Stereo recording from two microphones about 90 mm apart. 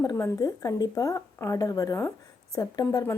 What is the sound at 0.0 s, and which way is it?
A woman's voice, 40° left (ahead or behind).